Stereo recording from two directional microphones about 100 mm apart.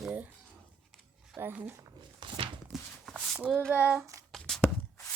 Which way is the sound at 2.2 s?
70° right (ahead or behind).